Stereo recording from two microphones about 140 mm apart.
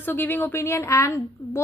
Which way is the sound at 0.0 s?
15° left (ahead or behind).